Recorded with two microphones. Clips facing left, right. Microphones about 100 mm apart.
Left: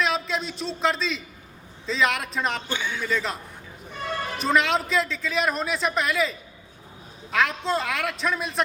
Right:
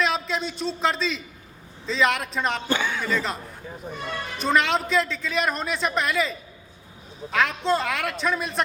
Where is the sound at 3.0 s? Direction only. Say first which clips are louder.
Right 1 dB; centre (ahead or behind).